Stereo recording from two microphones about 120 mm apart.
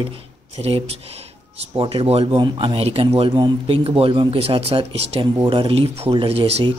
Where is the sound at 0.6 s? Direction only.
55° right (ahead or behind).